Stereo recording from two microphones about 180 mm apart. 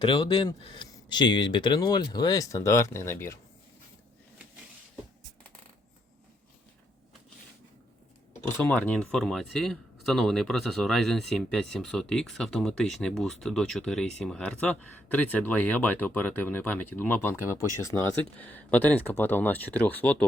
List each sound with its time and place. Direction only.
0.0 s speech: 30° left (ahead or behind); by 3.3 s 15° left (ahead or behind)
8.5 s speech: 10° left (ahead or behind)